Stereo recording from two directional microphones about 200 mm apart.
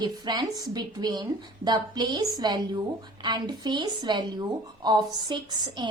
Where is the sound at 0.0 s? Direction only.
20° right (ahead or behind).